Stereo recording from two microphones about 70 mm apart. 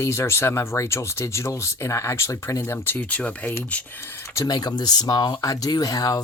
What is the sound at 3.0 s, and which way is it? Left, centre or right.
Speech, centre.